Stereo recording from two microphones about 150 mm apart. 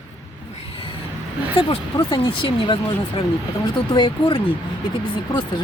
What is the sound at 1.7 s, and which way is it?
Speech, 35° left (ahead or behind).